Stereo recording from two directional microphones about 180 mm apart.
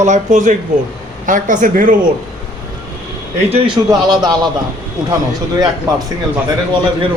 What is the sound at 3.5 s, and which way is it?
Speech, 25° right (ahead or behind).